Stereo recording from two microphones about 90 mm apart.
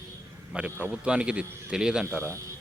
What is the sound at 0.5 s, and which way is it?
Speech, 15° right (ahead or behind).